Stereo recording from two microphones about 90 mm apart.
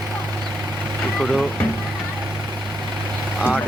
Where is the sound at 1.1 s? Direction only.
Centre (ahead or behind).